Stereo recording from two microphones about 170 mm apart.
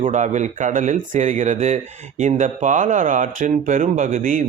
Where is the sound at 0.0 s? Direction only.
45° right (ahead or behind).